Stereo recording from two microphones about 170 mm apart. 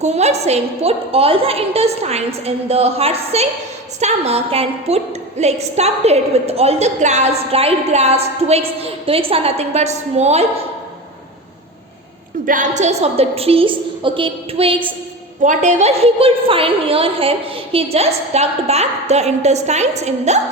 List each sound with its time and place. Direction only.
0.0 s a woman's voice: 40° right (ahead or behind)
12.5 s a woman's voice: 45° right (ahead or behind); by 14.9 s 30° right (ahead or behind)
15.4 s a woman's voice: 40° right (ahead or behind)